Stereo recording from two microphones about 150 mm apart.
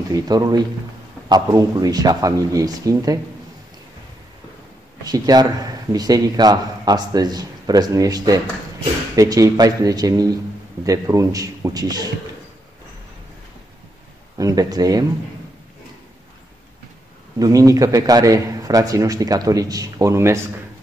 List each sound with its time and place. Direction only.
0.1 s speech: 25° right (ahead or behind)
5.0 s speech: 25° right (ahead or behind)
14.4 s speech: 25° right (ahead or behind)
17.4 s speech: 20° right (ahead or behind)